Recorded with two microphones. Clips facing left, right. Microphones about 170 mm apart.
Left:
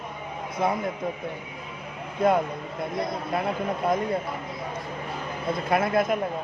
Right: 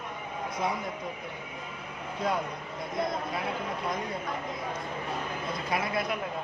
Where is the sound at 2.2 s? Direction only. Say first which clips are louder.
Left 9 dB; 55° left (ahead or behind).